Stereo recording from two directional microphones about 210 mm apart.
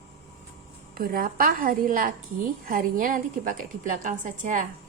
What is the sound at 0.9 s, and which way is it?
A woman's voice, 45° right (ahead or behind).